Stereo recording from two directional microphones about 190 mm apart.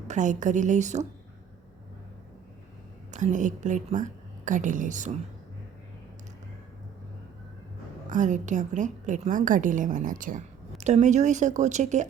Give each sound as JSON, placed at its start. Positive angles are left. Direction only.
{"t": 0.1, "sound": "a woman's voice", "side_deg": -40}
{"t": 3.1, "sound": "a woman's voice", "side_deg": -40}
{"t": 8.1, "sound": "a woman's voice", "side_deg": -40}